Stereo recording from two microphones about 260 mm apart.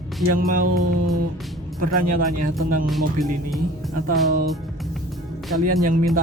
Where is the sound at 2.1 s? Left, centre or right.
Right.